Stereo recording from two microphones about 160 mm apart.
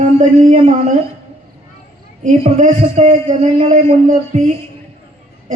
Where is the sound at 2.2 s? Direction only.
50° right (ahead or behind).